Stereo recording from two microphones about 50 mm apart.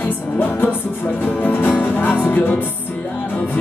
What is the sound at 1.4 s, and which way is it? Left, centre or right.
Music, left.